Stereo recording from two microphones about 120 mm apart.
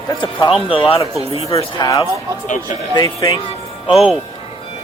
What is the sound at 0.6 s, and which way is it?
Speech, 45° left (ahead or behind).